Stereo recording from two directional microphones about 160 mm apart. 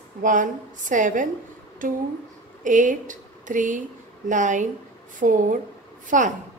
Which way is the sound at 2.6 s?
55° right (ahead or behind).